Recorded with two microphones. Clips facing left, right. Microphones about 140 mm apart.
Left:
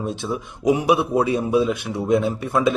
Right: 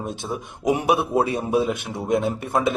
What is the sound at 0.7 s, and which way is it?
Speech, 65° right (ahead or behind).